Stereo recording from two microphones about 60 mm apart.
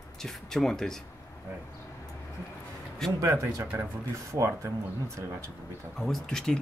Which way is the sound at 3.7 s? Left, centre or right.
Right.